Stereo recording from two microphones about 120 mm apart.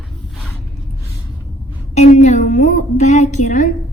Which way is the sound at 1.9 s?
75° left (ahead or behind).